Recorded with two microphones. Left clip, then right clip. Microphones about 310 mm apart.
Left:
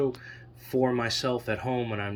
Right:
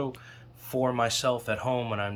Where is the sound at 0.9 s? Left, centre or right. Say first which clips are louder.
Right 2 dB; centre.